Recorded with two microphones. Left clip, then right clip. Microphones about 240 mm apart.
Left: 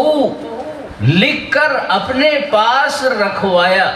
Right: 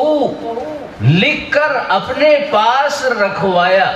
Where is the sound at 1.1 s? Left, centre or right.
Left.